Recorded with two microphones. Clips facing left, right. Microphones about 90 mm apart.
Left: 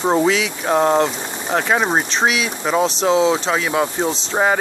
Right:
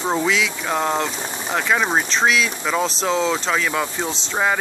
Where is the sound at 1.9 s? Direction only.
25° left (ahead or behind).